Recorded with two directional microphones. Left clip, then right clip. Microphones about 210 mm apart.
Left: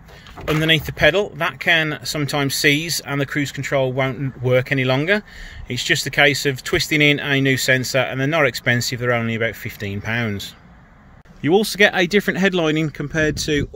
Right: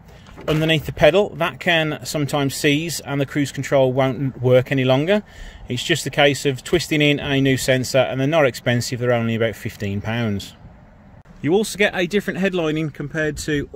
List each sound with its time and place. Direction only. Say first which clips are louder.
0.5 s speech: left 2 dB; 15° right (ahead or behind)
11.4 s speech: left 3 dB; centre (ahead or behind)